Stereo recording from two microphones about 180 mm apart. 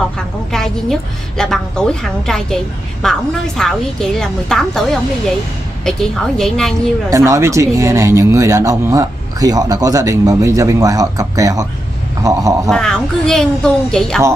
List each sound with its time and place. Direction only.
0.5 s a woman's voice: centre (ahead or behind)
7.1 s speech: 15° right (ahead or behind)
12.6 s a woman's voice: 5° left (ahead or behind)